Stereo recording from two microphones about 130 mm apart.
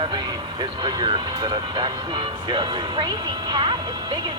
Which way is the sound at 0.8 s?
35° right (ahead or behind).